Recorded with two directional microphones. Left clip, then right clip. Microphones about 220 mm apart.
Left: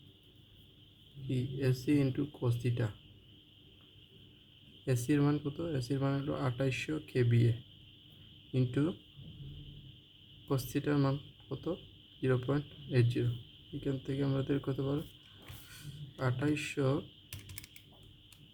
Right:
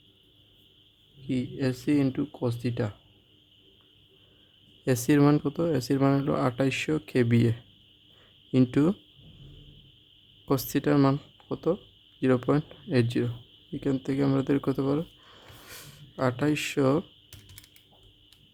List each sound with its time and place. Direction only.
1.3 s speech: 40° right (ahead or behind)
4.9 s speech: 45° right (ahead or behind)
8.5 s speech: 45° right (ahead or behind)
10.5 s speech: 45° right (ahead or behind)